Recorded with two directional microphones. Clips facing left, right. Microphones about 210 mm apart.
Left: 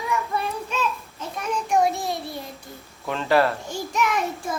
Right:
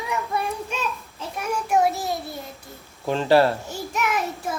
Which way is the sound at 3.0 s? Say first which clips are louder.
Right 3 dB; 30° right (ahead or behind).